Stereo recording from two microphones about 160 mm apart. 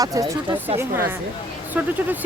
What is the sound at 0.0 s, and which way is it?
Speech, 20° right (ahead or behind).